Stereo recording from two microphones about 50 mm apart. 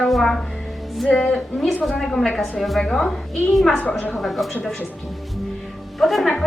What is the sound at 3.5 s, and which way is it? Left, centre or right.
A woman's voice, centre.